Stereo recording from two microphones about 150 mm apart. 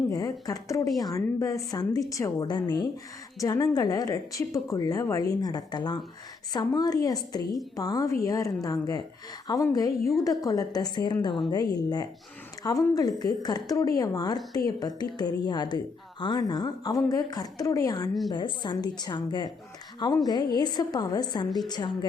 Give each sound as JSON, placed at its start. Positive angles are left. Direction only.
{"t": 0.1, "sound": "a woman's voice", "side_deg": 25}